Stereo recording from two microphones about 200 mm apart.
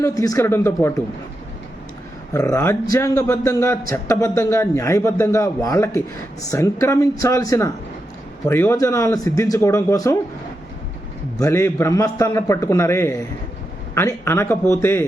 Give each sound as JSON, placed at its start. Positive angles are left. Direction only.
{"t": 0.0, "sound": "speech", "side_deg": 15}
{"t": 2.3, "sound": "speech", "side_deg": 15}
{"t": 11.3, "sound": "speech", "side_deg": 15}